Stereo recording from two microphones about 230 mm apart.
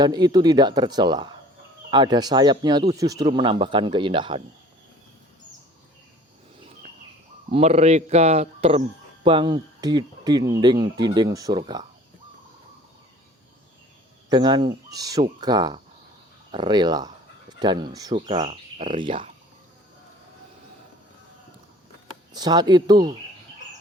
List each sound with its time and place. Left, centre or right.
0.0 s speech: centre
7.5 s speech: right
14.3 s speech: centre
22.3 s speech: centre